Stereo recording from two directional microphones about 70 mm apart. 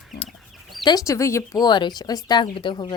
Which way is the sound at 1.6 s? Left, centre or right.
Left.